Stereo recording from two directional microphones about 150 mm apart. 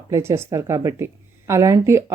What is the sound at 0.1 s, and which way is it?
A woman's voice, 20° right (ahead or behind).